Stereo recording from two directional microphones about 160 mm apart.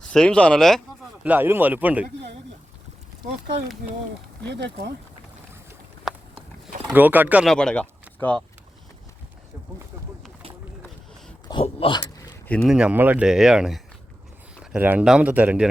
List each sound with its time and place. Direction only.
0.0 s speech: 5° left (ahead or behind)
1.2 s speech: 10° right (ahead or behind)
4.4 s speech: 90° right
6.9 s speech: 10° right (ahead or behind)
7.4 s speech: 5° left (ahead or behind)
11.4 s speech: 35° left (ahead or behind)
12.6 s speech: 5° right (ahead or behind)